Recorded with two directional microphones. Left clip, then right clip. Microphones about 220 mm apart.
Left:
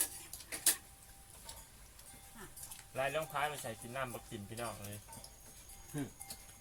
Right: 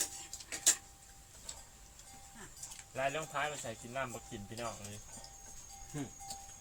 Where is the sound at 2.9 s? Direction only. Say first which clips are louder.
Even; 15° left (ahead or behind).